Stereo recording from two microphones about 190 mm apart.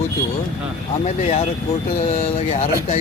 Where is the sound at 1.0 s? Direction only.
35° left (ahead or behind).